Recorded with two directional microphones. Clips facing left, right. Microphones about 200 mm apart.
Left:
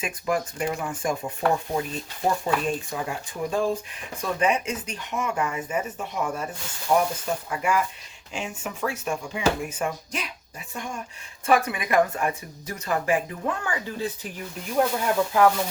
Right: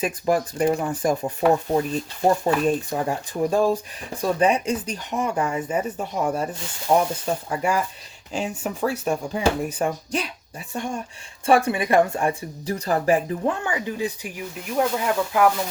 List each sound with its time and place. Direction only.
0.0 s speech: 35° right (ahead or behind)
2.2 s speech: 40° right (ahead or behind)
11.4 s speech: 30° right (ahead or behind); by 15.5 s 5° right (ahead or behind)